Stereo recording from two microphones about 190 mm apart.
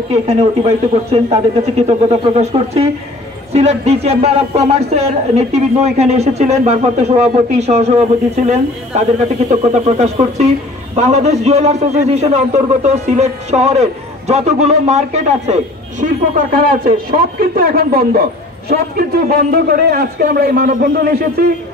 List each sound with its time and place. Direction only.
1.1 s a man's voice: 30° right (ahead or behind); by 21.5 s 50° right (ahead or behind)